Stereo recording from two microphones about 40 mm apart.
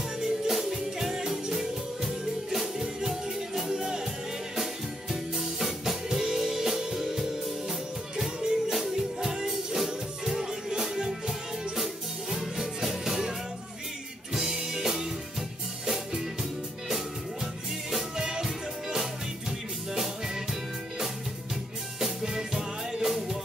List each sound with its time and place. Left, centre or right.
0.2 s music: centre
5.1 s music: centre
8.4 s music: centre
8.7 s music: centre
14.3 s music: centre
17.9 s music: centre
22.0 s music: centre